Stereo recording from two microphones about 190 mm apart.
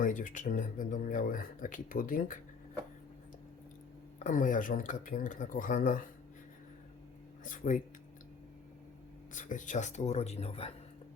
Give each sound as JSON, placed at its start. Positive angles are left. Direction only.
{"t": 0.0, "sound": "speech", "side_deg": 45}
{"t": 4.2, "sound": "speech", "side_deg": 40}
{"t": 7.4, "sound": "speech", "side_deg": 45}
{"t": 9.3, "sound": "speech", "side_deg": 45}